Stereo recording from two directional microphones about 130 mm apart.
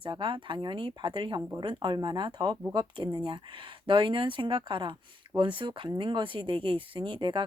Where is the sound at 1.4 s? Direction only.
20° right (ahead or behind).